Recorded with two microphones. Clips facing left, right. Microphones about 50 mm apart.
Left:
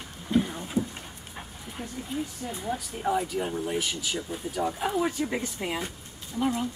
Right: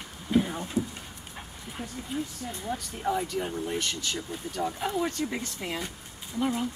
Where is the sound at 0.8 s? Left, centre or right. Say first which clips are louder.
Left 2 dB; left.